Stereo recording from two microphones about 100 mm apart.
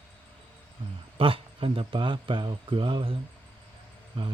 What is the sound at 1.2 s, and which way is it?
Speech, 65° right (ahead or behind).